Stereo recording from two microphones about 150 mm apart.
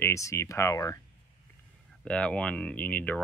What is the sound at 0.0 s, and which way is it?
Speech, 20° left (ahead or behind).